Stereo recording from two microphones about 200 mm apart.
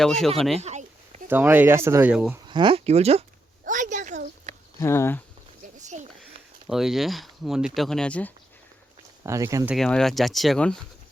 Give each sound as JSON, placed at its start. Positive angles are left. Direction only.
{"t": 0.0, "sound": "speech", "side_deg": 0}
{"t": 0.6, "sound": "a sound", "side_deg": -35}
{"t": 1.3, "sound": "speech", "side_deg": -10}
{"t": 2.5, "sound": "speech", "side_deg": -25}
{"t": 3.6, "sound": "a sound", "side_deg": -40}
{"t": 4.8, "sound": "speech", "side_deg": 10}
{"t": 5.8, "sound": "a sound", "side_deg": -35}
{"t": 6.7, "sound": "speech", "side_deg": 0}
{"t": 9.2, "sound": "speech", "side_deg": -15}
{"t": 9.7, "sound": "speech", "side_deg": 0}